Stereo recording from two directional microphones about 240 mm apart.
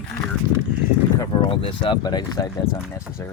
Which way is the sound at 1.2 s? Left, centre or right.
Centre.